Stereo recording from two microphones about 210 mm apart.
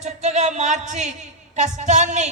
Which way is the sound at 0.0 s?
35° right (ahead or behind).